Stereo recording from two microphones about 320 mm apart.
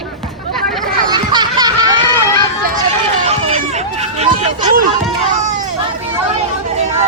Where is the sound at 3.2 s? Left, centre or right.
Centre.